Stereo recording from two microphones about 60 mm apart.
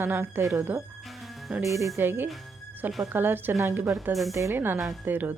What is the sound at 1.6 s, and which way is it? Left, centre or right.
Speech, right.